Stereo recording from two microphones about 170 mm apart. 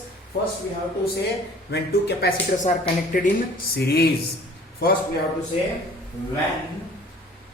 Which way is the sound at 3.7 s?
70° left (ahead or behind).